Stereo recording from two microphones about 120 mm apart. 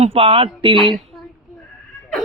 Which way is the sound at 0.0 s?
55° right (ahead or behind).